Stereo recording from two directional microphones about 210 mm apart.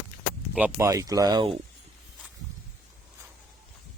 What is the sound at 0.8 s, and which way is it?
Speech, 15° right (ahead or behind).